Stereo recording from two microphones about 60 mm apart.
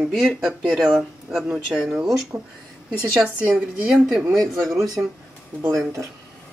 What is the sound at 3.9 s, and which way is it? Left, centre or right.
Speech, centre.